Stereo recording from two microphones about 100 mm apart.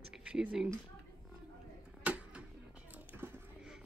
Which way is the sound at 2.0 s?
10° right (ahead or behind).